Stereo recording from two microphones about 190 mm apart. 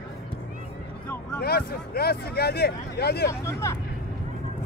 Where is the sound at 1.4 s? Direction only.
55° left (ahead or behind).